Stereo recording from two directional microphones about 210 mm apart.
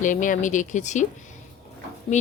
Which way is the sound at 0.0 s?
40° left (ahead or behind).